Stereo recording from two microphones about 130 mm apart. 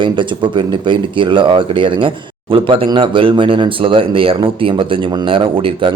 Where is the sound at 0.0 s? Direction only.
40° right (ahead or behind).